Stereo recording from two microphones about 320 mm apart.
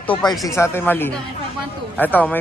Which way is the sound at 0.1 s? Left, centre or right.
Centre.